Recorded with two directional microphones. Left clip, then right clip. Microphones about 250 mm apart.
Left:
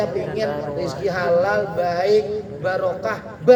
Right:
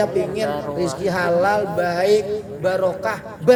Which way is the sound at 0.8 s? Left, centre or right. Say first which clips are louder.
Right 2 dB; right.